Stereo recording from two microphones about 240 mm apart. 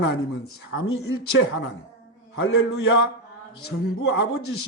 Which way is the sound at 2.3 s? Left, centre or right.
Left.